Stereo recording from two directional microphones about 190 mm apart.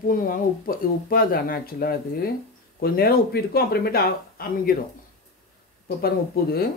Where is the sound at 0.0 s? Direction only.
50° left (ahead or behind).